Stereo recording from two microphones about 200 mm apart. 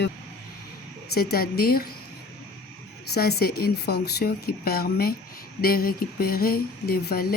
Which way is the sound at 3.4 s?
50° left (ahead or behind).